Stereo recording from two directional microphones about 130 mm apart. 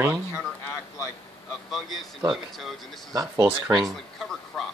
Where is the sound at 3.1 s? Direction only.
25° right (ahead or behind).